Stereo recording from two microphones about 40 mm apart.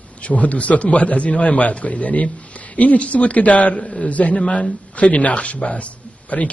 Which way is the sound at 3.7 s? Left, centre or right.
Centre.